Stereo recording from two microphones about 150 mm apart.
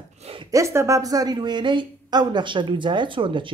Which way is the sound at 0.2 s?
40° right (ahead or behind).